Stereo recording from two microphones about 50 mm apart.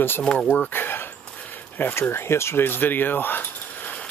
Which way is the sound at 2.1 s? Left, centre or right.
Left.